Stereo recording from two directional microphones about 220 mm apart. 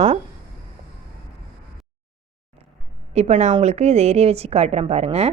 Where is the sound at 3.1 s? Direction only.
30° right (ahead or behind).